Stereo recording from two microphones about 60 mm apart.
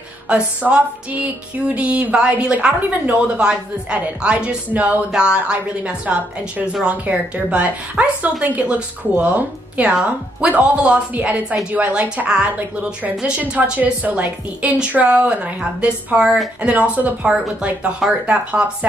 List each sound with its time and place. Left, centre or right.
0.3 s music: centre
5.1 s a woman's voice: centre
6.7 s music: centre